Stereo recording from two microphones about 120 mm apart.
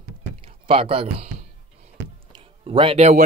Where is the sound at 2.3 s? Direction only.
50° right (ahead or behind).